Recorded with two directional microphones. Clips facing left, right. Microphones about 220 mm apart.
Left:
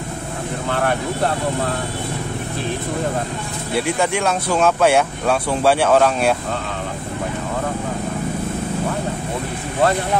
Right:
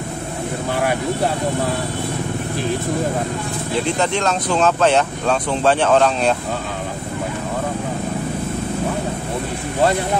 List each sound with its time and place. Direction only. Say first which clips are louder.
0.7 s speech: even; 10° right (ahead or behind)
3.7 s speech: left 1 dB; 10° left (ahead or behind)